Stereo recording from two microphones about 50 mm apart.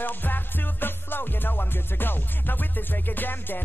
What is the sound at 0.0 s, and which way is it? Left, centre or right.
Music, left.